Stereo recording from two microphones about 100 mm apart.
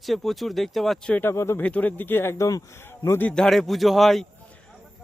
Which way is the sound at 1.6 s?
15° left (ahead or behind).